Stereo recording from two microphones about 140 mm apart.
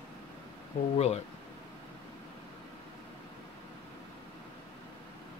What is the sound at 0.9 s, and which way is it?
Speech, 50° left (ahead or behind).